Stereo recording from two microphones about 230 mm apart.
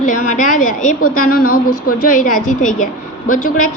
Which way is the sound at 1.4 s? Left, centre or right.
Left.